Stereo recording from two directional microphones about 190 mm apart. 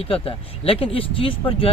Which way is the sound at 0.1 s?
30° left (ahead or behind).